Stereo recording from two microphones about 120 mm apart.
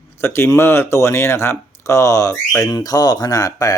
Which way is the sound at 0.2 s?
20° left (ahead or behind).